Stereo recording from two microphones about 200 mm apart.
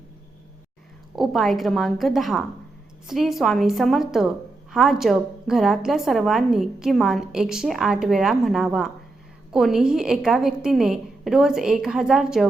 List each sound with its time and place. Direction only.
1.1 s a woman's voice: centre (ahead or behind)